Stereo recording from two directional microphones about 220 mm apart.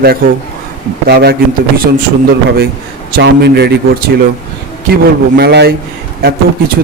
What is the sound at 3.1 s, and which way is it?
Speech, 50° right (ahead or behind).